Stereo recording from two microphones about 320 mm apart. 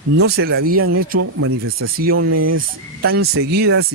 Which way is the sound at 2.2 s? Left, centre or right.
Right.